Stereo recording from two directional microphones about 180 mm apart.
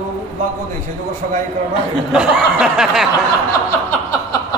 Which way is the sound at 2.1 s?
5° right (ahead or behind).